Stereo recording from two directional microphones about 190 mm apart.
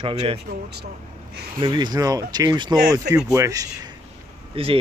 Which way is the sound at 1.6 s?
25° right (ahead or behind).